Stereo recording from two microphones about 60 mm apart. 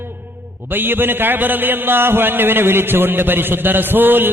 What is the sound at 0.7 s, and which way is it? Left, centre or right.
A man's voice, right.